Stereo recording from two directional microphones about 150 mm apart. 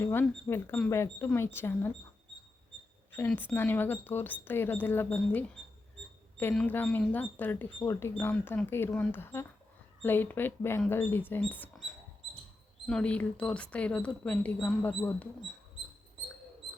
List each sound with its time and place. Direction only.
0.0 s speech: 15° left (ahead or behind)
3.1 s speech: 15° left (ahead or behind)
6.7 s speech: 10° left (ahead or behind)
12.9 s speech: 10° left (ahead or behind)